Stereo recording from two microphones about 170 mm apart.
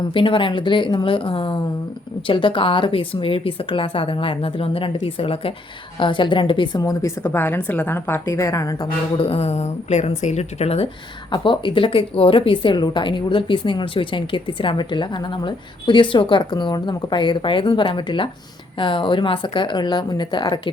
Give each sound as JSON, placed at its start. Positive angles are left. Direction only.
{"t": 0.1, "sound": "a woman's voice", "side_deg": 30}
{"t": 9.1, "sound": "a woman's voice", "side_deg": 35}